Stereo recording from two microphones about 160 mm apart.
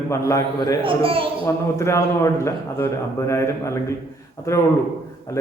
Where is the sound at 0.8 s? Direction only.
35° right (ahead or behind).